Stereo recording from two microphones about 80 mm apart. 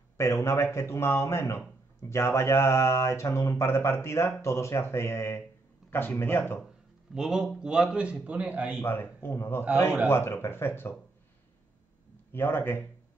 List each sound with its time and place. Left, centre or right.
0.2 s a man's voice: left
7.2 s a man's voice: centre
8.8 s a man's voice: left
12.3 s a man's voice: left